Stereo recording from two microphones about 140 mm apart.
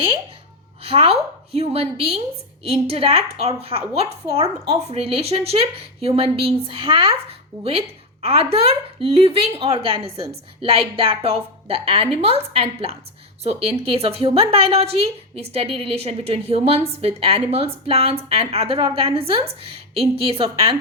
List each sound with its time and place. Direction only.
0.8 s speech: 45° right (ahead or behind)